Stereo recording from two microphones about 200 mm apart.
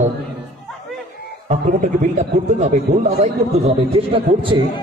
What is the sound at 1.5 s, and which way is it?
Speech, 40° right (ahead or behind).